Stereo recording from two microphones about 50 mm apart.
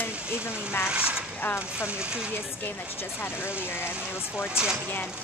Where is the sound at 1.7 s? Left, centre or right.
Centre.